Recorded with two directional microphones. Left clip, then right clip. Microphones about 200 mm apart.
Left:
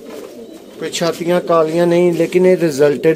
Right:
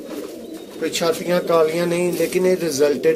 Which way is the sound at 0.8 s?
60° left (ahead or behind).